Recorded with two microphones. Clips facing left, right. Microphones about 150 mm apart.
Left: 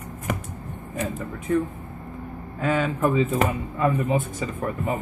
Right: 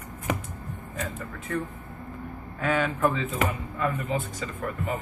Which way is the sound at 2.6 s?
Centre (ahead or behind).